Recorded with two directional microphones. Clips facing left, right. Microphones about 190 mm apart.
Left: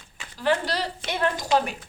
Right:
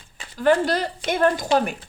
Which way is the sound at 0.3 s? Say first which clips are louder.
Right 6 dB; 50° right (ahead or behind).